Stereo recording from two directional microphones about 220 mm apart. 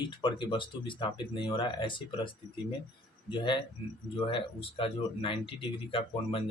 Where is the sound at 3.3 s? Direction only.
20° left (ahead or behind).